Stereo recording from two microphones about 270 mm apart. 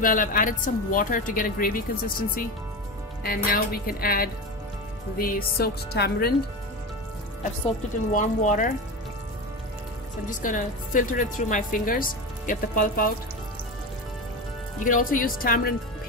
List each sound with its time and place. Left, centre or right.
0.0 s a woman's voice: left
8.1 s a woman's voice: left
10.2 s a woman's voice: left
14.9 s a woman's voice: left